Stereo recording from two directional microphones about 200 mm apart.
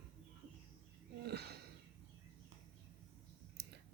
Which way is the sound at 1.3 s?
55° right (ahead or behind).